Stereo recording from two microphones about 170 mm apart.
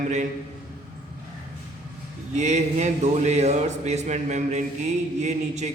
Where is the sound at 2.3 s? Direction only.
45° right (ahead or behind).